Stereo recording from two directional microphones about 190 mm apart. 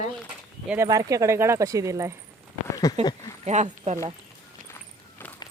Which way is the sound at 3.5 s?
35° right (ahead or behind).